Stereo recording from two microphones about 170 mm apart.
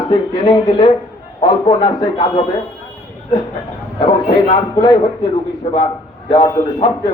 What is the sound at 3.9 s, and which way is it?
A man's voice, 35° left (ahead or behind).